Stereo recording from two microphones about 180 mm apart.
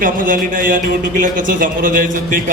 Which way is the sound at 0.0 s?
50° right (ahead or behind).